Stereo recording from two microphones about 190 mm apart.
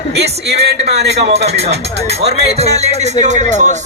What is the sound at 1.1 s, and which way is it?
Speech, 35° right (ahead or behind).